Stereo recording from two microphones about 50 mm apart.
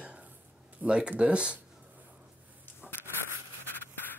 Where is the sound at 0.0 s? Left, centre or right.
Right.